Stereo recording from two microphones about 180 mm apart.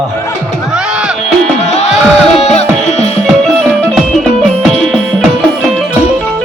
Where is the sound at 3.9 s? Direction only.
Centre (ahead or behind).